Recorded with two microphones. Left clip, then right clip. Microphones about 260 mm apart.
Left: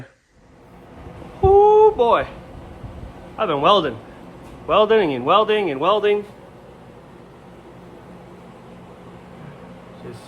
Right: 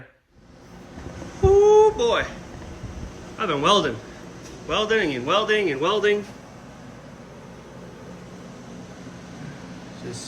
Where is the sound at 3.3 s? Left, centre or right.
Centre.